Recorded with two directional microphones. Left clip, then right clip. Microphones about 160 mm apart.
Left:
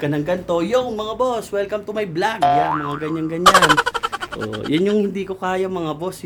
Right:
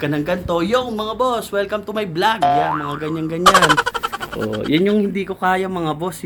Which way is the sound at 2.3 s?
Centre (ahead or behind).